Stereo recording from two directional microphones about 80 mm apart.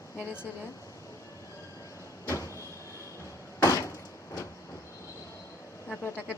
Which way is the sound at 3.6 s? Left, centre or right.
Left.